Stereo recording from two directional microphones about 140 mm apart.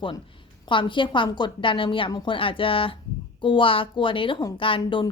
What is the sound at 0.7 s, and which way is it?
Speech, 35° left (ahead or behind).